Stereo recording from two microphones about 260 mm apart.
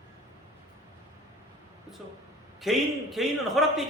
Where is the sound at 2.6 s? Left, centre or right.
Centre.